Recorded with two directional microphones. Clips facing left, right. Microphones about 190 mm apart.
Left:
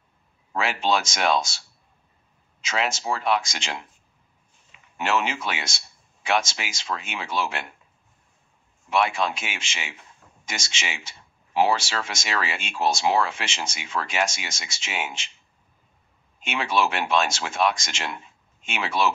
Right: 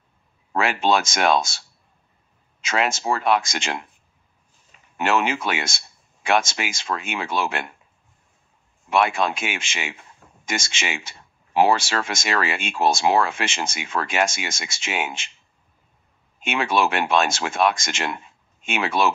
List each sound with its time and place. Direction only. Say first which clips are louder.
0.5 s speech: right 4 dB; 55° right (ahead or behind)
2.6 s speech: right 4 dB; 55° right (ahead or behind)
8.9 s speech: right 3 dB; 55° right (ahead or behind)
16.4 s speech: right 3 dB; 55° right (ahead or behind)